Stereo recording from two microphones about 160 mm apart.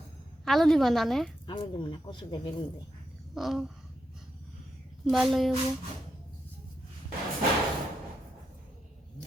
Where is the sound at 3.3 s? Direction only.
Centre (ahead or behind).